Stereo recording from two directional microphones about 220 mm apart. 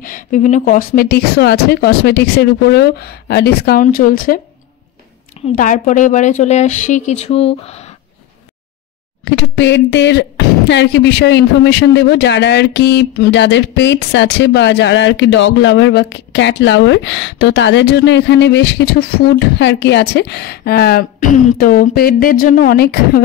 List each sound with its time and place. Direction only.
0.0 s speech: 35° left (ahead or behind)
5.6 s speech: 35° left (ahead or behind)
9.2 s speech: 55° left (ahead or behind)